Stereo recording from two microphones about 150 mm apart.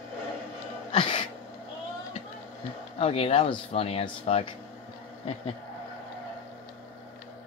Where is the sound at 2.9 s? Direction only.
40° left (ahead or behind).